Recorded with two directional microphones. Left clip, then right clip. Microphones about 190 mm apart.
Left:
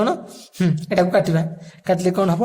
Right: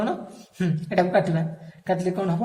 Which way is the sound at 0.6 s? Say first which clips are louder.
Left 4 dB; 45° left (ahead or behind).